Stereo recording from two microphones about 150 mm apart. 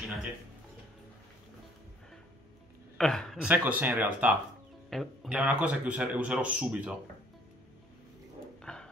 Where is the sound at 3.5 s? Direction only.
10° right (ahead or behind).